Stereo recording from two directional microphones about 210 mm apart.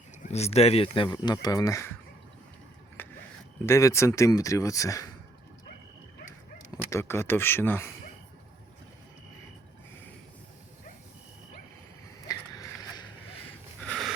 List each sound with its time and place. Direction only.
0.3 s speech: 30° left (ahead or behind); by 1.9 s 15° left (ahead or behind)
3.0 s a sound: 10° left (ahead or behind)
3.7 s speech: 15° left (ahead or behind)
6.9 s speech: 10° left (ahead or behind)
12.3 s a sound: 15° left (ahead or behind)
13.8 s snort: 5° left (ahead or behind)